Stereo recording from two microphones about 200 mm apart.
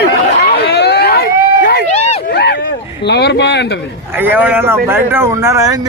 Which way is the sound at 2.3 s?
55° left (ahead or behind).